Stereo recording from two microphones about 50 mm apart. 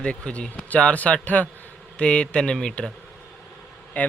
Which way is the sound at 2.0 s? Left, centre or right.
Left.